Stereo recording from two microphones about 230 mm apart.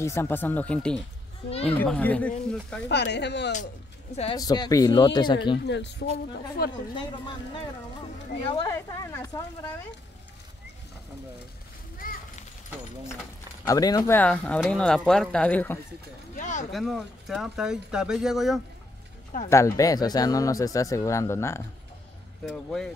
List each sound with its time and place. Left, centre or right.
0.0 s speech: centre
1.5 s speech: left
1.8 s speech: centre
2.9 s speech: left
4.1 s speech: left
4.4 s speech: centre
5.7 s a woman's voice: left
8.5 s speech: centre
12.0 s a sound: left
13.7 s speech: centre
16.3 s a sound: left
16.7 s speech: centre
19.5 s speech: centre